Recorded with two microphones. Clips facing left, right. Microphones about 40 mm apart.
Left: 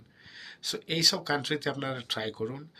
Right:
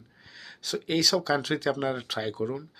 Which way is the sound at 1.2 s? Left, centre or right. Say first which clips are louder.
Right 3 dB; centre.